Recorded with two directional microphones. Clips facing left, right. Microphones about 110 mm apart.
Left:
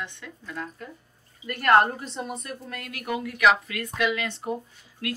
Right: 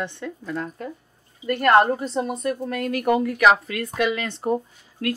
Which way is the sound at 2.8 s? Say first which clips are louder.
Right 10 dB; 40° right (ahead or behind).